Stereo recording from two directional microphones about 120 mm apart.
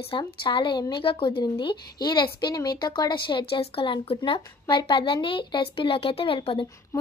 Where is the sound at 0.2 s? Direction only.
40° left (ahead or behind).